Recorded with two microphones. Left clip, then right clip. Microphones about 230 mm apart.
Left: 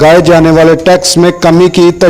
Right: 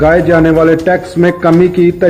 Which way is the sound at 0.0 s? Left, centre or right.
Left.